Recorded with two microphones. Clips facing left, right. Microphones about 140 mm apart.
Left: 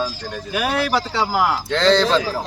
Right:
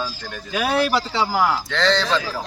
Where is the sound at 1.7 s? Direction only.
35° left (ahead or behind).